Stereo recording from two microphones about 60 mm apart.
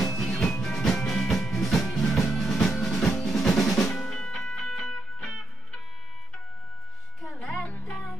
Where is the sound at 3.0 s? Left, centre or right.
Centre.